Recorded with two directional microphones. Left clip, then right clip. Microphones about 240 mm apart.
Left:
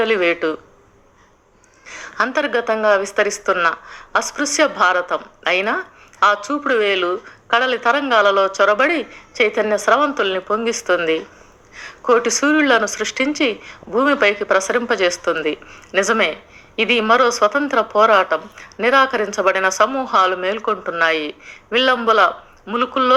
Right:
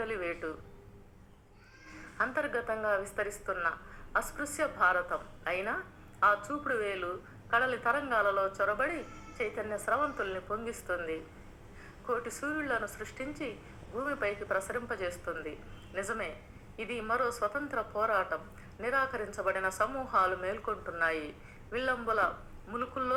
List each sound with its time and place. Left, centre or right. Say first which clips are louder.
0.0 s a woman's voice: left 19 dB; left
2.1 s a woman's voice: left 14 dB; left